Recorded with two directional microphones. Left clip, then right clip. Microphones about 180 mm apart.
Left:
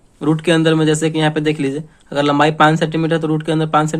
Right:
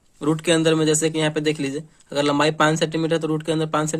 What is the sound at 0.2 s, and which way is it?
Speech, 30° right (ahead or behind).